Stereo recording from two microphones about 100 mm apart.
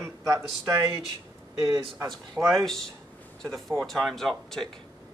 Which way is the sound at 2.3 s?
Centre (ahead or behind).